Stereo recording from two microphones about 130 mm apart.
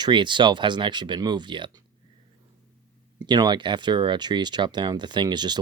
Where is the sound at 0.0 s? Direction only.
35° right (ahead or behind).